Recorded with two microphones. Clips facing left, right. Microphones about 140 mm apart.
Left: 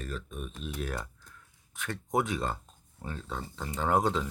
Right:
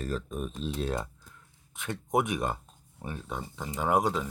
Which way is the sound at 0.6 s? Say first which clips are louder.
Right 4 dB; 25° right (ahead or behind).